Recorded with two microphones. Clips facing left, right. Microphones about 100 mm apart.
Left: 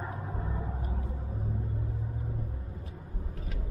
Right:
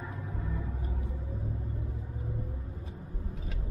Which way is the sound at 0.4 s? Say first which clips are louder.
Right 1 dB; 35° left (ahead or behind).